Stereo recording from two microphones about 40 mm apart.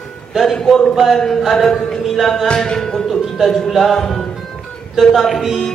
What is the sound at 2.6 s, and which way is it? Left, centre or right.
Music, centre.